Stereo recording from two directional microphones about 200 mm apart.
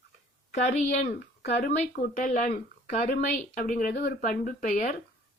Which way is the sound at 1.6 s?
45° left (ahead or behind).